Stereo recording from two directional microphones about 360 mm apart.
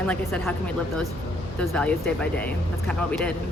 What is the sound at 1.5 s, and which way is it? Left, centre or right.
Speech, centre.